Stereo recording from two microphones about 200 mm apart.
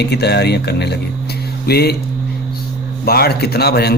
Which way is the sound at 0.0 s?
55° left (ahead or behind).